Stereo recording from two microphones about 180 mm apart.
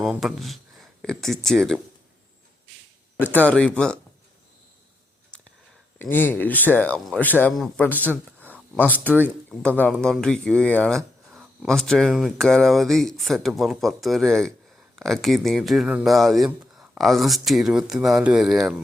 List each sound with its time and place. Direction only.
0.0 s speech: centre (ahead or behind)
3.5 s speech: 5° left (ahead or behind)
6.0 s speech: 10° left (ahead or behind)
7.9 s speech: 10° right (ahead or behind)
8.4 s a sound: 5° left (ahead or behind)
9.2 s speech: 10° left (ahead or behind)